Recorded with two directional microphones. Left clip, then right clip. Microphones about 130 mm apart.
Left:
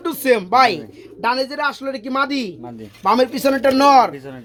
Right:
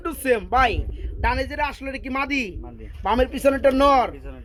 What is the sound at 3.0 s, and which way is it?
Speech, 25° right (ahead or behind).